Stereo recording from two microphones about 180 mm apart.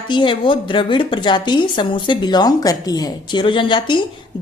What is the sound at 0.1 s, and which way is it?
A woman's voice, 25° left (ahead or behind).